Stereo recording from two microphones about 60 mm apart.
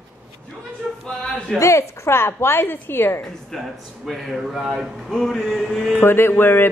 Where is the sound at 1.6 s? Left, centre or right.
Left.